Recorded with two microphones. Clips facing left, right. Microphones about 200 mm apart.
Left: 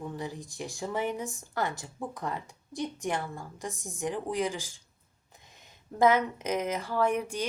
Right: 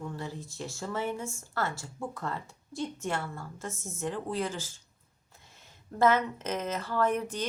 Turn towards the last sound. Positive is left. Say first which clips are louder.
# left 1 dB
turn(degrees=10)  # may be behind; listen again after turning